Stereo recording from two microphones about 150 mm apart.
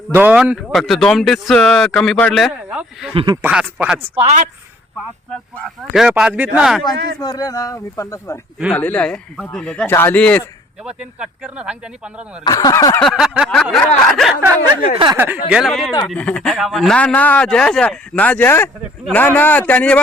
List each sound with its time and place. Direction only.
0.1 s speech: 10° right (ahead or behind)
4.1 s speech: 45° right (ahead or behind)
5.5 s speech: centre (ahead or behind)
7.2 s speech: 25° left (ahead or behind)
8.7 s speech: 10° left (ahead or behind)
10.8 s speech: 5° right (ahead or behind)
12.5 s speech: 25° left (ahead or behind)
13.0 s speech: centre (ahead or behind)
15.1 s speech: 15° right (ahead or behind)
15.4 s speech: centre (ahead or behind)